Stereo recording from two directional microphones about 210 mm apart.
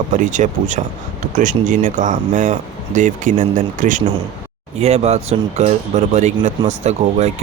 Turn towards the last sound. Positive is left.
turn(degrees=-35)  # may be behind; listen again after turning